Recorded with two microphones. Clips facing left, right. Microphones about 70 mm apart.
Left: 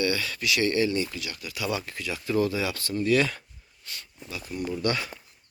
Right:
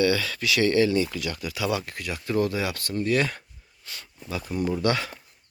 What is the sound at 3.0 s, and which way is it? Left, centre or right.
Speech, right.